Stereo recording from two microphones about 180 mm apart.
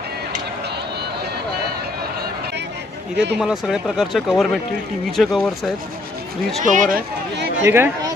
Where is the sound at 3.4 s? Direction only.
5° right (ahead or behind).